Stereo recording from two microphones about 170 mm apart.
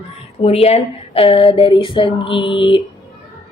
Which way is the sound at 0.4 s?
40° left (ahead or behind).